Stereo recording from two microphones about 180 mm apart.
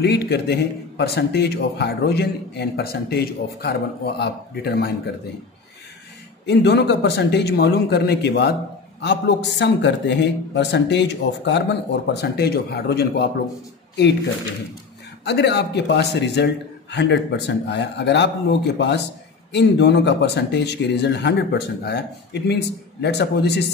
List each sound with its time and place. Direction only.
0.0 s a man's voice: 65° left (ahead or behind)
6.4 s speech: 70° left (ahead or behind)
12.1 s a man's voice: 65° left (ahead or behind)
15.2 s speech: 70° left (ahead or behind)